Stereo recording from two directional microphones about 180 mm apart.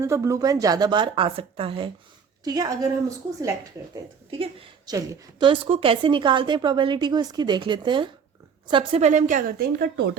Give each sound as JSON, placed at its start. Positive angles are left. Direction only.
{"t": 0.0, "sound": "a woman's voice", "side_deg": -15}
{"t": 3.9, "sound": "a woman's voice", "side_deg": -30}